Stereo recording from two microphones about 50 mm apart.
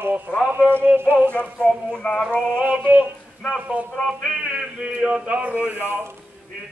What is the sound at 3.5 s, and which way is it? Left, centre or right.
A man's voice, right.